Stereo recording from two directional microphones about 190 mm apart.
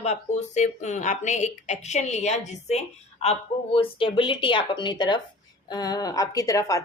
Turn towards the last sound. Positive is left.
turn(degrees=15)  # may be behind; listen again after turning